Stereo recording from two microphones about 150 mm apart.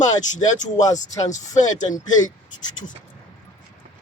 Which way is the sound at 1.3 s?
55° left (ahead or behind).